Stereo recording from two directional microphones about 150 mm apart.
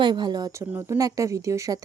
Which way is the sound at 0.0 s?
30° right (ahead or behind).